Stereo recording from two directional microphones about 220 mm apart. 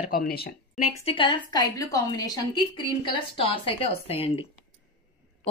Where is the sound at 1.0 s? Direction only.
20° left (ahead or behind).